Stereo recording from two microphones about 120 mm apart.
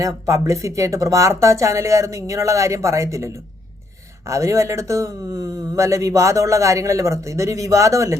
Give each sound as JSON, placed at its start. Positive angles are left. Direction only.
{"t": 0.0, "sound": "speech", "side_deg": -25}
{"t": 4.3, "sound": "speech", "side_deg": -25}